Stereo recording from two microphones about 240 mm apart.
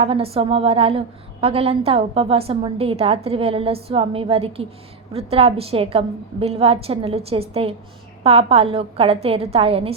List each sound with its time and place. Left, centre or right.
0.0 s a woman's voice: right